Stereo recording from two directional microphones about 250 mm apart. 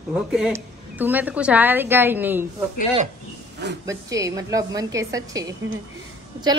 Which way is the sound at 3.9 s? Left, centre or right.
Centre.